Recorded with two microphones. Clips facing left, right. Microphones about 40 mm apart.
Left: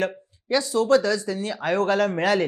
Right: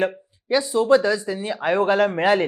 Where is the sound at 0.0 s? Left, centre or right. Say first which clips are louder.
Right 3 dB; centre.